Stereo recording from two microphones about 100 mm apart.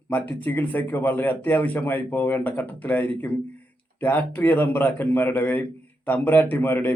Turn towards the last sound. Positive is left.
turn(degrees=20)  # may be behind; listen again after turning